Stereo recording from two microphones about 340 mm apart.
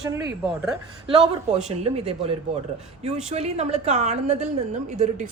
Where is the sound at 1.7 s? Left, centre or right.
Centre.